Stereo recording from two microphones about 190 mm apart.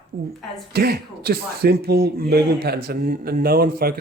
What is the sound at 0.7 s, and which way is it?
A man's voice, 55° right (ahead or behind).